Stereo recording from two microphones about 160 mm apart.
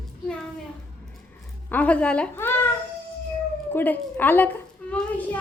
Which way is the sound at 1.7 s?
10° left (ahead or behind).